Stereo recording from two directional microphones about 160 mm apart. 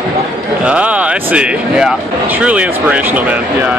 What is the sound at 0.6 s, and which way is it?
Speech, 5° right (ahead or behind).